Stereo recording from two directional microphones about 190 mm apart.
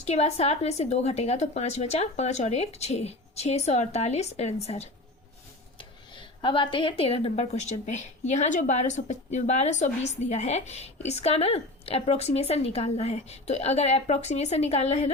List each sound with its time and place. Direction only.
0.0 s speech: 35° left (ahead or behind)